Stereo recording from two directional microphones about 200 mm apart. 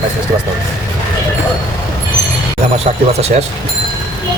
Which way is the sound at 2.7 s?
30° right (ahead or behind).